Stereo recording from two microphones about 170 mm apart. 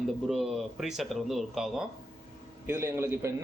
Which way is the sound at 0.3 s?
Centre (ahead or behind).